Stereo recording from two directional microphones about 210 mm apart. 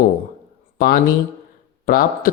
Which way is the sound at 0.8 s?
45° left (ahead or behind).